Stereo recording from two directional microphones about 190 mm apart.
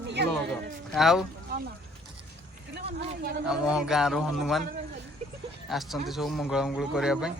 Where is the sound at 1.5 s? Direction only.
55° right (ahead or behind).